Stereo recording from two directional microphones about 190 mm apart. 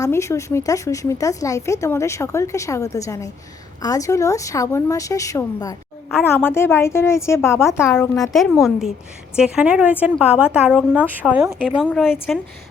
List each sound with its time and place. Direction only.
0.0 s speech: 15° left (ahead or behind)
8.0 s a woman's voice: centre (ahead or behind)